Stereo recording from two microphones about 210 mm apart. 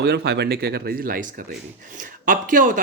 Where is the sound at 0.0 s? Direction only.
50° right (ahead or behind).